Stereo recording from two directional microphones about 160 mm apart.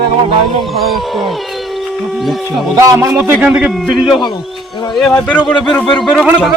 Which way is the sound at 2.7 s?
20° right (ahead or behind).